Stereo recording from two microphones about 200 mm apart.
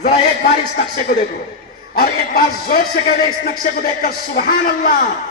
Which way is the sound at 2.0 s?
50° left (ahead or behind).